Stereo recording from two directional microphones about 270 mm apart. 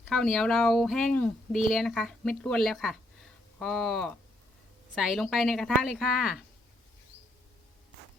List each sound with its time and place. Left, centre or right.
0.1 s a woman's voice: centre